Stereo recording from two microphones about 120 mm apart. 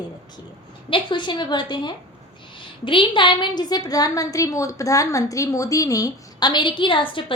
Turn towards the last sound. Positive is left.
turn(degrees=45)  # may be behind; listen again after turning